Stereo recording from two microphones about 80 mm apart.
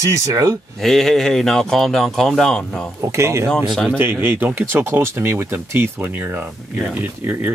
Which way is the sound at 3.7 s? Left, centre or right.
Centre.